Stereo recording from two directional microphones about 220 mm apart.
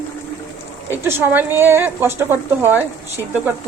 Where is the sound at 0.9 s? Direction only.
10° right (ahead or behind).